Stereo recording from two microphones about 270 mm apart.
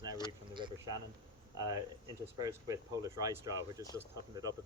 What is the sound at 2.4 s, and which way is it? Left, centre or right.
Speech, centre.